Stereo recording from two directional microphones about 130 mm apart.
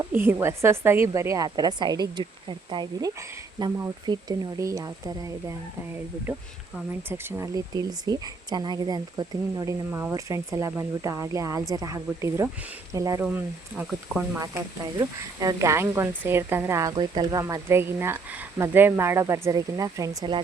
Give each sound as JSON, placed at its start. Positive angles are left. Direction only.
{"t": 0.0, "sound": "speech", "side_deg": -15}
{"t": 3.2, "sound": "speech", "side_deg": -20}
{"t": 4.0, "sound": "speech", "side_deg": -35}
{"t": 7.1, "sound": "speech", "side_deg": -20}
{"t": 9.9, "sound": "speech", "side_deg": -20}
{"t": 13.3, "sound": "speech", "side_deg": -10}
{"t": 14.3, "sound": "speech", "side_deg": -25}
{"t": 16.9, "sound": "speech", "side_deg": -35}
{"t": 17.4, "sound": "speech", "side_deg": -20}